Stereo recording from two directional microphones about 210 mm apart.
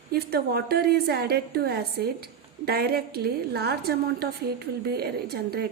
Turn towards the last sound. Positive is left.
turn(degrees=-50)  # may be behind; listen again after turning